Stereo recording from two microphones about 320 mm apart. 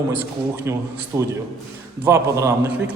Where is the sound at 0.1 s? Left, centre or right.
Centre.